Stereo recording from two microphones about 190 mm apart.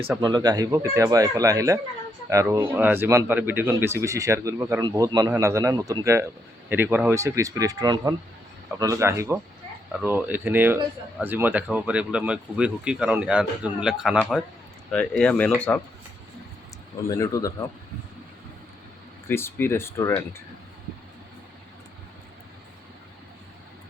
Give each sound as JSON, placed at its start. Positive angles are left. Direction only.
{"t": 0.2, "sound": "speech", "side_deg": -20}
{"t": 17.1, "sound": "speech", "side_deg": 15}
{"t": 19.3, "sound": "speech", "side_deg": 10}